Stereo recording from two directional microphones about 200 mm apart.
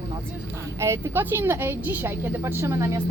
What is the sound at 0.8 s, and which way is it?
A woman's voice, 15° right (ahead or behind).